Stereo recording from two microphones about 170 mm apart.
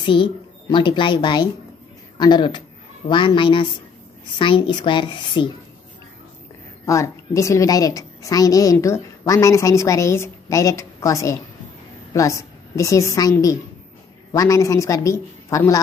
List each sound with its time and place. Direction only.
0.0 s a woman's voice: 30° left (ahead or behind)
6.9 s a woman's voice: 20° left (ahead or behind)